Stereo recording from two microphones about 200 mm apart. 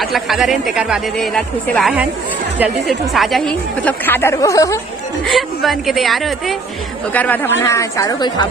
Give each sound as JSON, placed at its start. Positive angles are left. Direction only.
{"t": 0.0, "sound": "a woman's voice", "side_deg": 0}
{"t": 5.2, "sound": "a woman's voice", "side_deg": 0}